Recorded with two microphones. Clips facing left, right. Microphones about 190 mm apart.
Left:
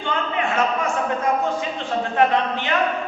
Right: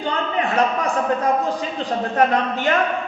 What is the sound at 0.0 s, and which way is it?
A man's voice, 35° right (ahead or behind).